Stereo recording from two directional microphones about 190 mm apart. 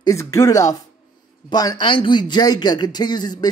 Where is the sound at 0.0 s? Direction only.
15° left (ahead or behind).